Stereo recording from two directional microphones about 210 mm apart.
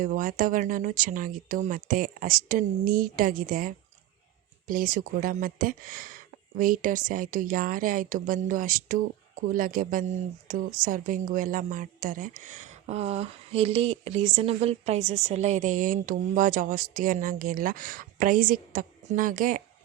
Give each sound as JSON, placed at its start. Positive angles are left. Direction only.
{"t": 0.0, "sound": "a woman's voice", "side_deg": -40}